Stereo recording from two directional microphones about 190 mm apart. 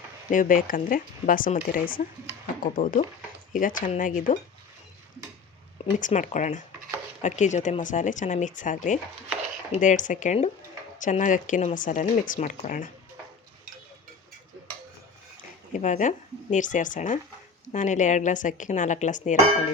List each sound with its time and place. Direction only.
0.3 s speech: 45° left (ahead or behind)
6.0 s speech: 40° left (ahead or behind)
15.7 s speech: 40° left (ahead or behind)